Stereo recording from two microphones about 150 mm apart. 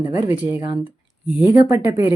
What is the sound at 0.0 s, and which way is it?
Speech, 30° right (ahead or behind).